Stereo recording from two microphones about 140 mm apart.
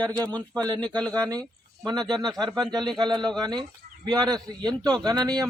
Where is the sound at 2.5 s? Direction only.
Centre (ahead or behind).